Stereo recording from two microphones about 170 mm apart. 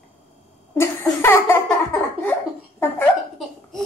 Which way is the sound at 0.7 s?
15° left (ahead or behind).